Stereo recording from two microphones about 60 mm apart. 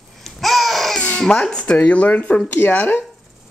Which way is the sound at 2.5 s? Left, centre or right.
Left.